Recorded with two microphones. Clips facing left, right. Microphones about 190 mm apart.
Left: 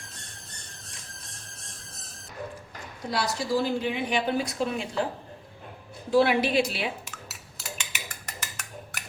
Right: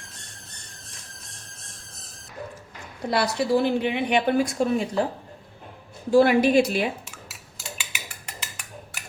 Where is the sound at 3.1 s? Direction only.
65° right (ahead or behind); by 4.9 s 45° right (ahead or behind).